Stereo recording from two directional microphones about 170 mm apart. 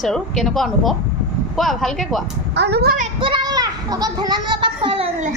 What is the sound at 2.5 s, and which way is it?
Speech, 80° right.